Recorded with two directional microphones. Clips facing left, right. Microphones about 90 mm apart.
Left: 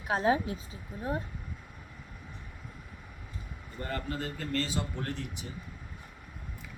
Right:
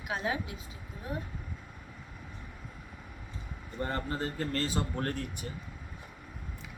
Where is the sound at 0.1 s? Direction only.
35° left (ahead or behind).